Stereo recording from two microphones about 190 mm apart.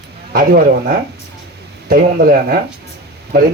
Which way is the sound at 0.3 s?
50° right (ahead or behind).